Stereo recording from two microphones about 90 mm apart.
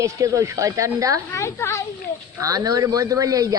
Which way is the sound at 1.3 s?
30° left (ahead or behind).